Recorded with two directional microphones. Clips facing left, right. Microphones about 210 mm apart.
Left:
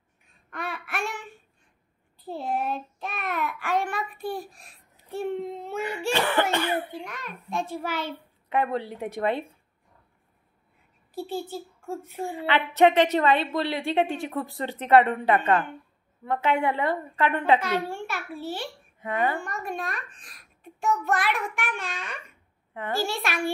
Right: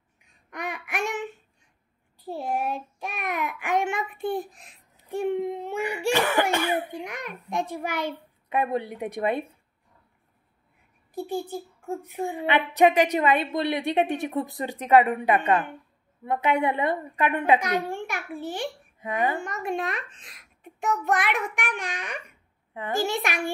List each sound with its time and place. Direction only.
0.5 s babbling: 15° right (ahead or behind)
2.1 s child singing: 10° right (ahead or behind)
11.1 s a sound: 15° right (ahead or behind)
11.9 s a woman's voice: 15° right (ahead or behind)